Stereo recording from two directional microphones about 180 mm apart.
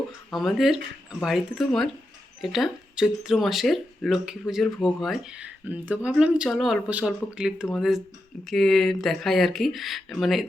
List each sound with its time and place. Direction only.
0.3 s speech: centre (ahead or behind)